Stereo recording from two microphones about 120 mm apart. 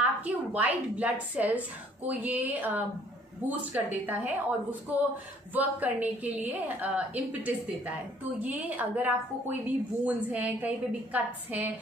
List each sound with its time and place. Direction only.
0.0 s a woman's voice: 10° right (ahead or behind)